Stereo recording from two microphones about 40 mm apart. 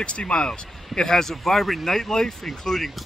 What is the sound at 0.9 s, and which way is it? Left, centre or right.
Speech, centre.